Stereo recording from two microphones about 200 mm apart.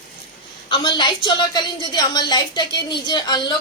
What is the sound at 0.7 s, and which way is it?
A woman's voice, 25° left (ahead or behind).